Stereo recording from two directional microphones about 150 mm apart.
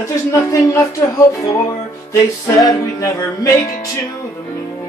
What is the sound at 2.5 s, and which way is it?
Music, 20° left (ahead or behind).